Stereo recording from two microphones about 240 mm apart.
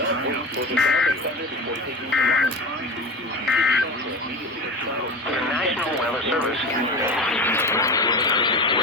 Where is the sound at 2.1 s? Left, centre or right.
Centre.